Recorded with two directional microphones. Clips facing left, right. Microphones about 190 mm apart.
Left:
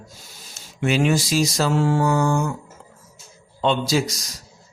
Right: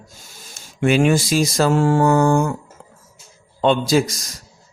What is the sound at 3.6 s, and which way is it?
Speech, 50° right (ahead or behind).